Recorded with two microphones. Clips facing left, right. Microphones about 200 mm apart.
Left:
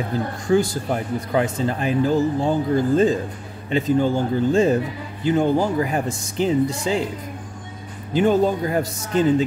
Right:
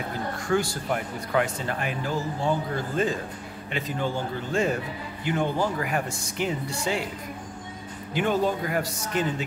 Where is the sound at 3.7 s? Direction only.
35° left (ahead or behind).